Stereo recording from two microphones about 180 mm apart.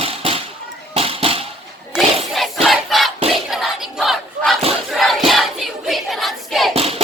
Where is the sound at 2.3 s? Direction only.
Centre (ahead or behind).